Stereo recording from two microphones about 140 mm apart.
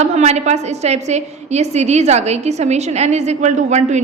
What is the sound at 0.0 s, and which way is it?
A woman's voice, 55° right (ahead or behind).